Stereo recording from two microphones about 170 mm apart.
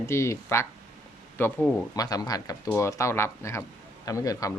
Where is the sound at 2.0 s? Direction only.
20° left (ahead or behind).